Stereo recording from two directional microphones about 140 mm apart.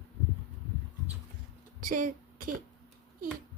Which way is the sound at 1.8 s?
70° right (ahead or behind).